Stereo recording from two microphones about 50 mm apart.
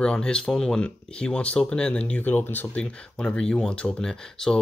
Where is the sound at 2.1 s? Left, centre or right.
Left.